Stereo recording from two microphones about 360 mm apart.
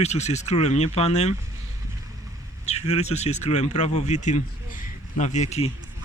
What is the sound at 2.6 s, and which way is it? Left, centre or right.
Speech, centre.